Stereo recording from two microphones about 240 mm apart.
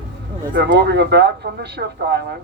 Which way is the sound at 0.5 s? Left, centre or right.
Right.